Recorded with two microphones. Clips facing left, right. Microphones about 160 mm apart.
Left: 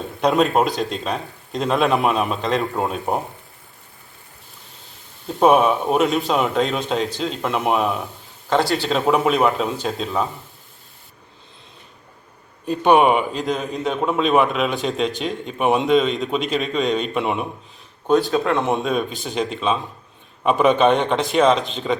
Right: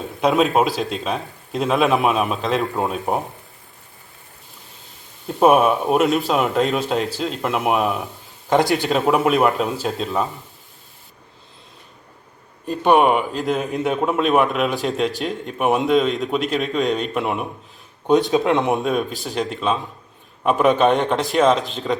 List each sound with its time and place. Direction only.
0.2 s a man's voice: centre (ahead or behind)
5.3 s a man's voice: 5° right (ahead or behind)
8.4 s a man's voice: 15° right (ahead or behind)
12.6 s a man's voice: centre (ahead or behind)
18.0 s speech: 20° right (ahead or behind)
18.7 s a man's voice: centre (ahead or behind)